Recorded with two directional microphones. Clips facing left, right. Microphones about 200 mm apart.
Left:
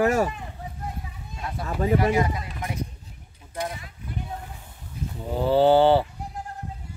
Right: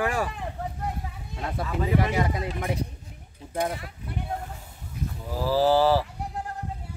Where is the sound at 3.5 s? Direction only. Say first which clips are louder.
Right 4 dB; 55° right (ahead or behind).